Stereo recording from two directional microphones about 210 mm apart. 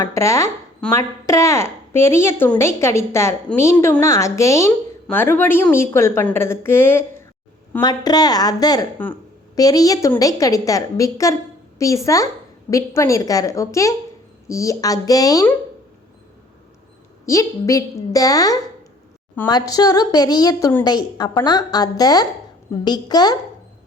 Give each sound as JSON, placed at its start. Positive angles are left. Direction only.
{"t": 0.0, "sound": "speech", "side_deg": 15}
{"t": 17.2, "sound": "a woman's voice", "side_deg": 15}